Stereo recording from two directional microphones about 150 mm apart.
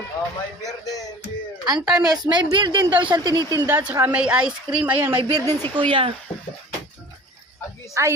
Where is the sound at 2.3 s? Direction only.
30° right (ahead or behind).